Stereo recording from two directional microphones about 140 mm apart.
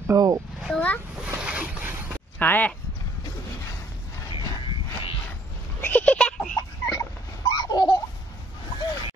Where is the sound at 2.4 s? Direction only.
10° left (ahead or behind).